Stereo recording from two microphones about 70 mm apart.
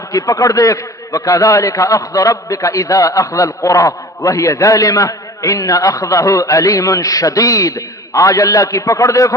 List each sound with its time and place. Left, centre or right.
0.1 s a man's voice: left